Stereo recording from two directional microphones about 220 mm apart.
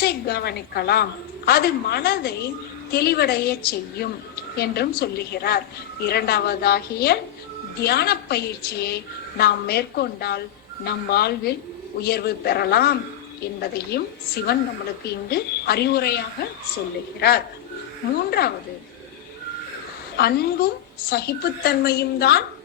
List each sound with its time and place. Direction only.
0.0 s a woman's voice: 45° left (ahead or behind)
20.1 s a woman's voice: 45° left (ahead or behind)